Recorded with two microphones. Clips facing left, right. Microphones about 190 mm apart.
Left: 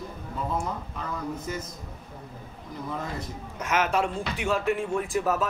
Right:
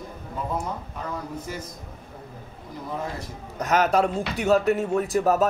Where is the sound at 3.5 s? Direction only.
35° right (ahead or behind).